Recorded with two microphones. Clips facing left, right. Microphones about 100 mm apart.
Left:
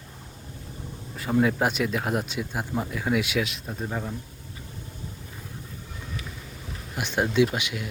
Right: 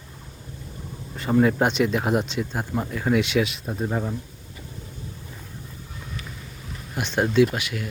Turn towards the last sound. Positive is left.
turn(degrees=15)  # may be behind; listen again after turning